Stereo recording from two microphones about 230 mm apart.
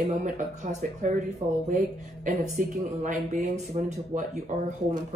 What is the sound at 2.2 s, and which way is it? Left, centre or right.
Speech, right.